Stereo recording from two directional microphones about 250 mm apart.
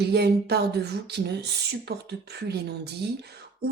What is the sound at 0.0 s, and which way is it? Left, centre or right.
Speech, right.